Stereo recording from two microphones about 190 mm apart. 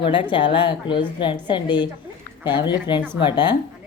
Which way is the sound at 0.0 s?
25° left (ahead or behind).